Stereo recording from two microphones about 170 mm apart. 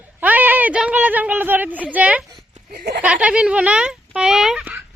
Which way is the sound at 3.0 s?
10° right (ahead or behind).